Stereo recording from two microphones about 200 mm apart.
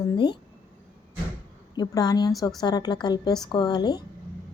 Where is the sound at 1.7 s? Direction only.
20° left (ahead or behind).